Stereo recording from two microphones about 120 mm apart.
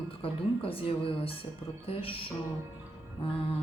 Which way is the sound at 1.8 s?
50° left (ahead or behind).